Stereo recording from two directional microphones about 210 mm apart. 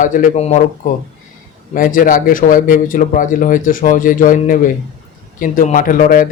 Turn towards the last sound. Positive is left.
turn(degrees=40)  # may be behind; listen again after turning